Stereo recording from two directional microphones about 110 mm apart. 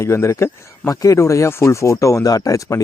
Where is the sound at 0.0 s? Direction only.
25° left (ahead or behind).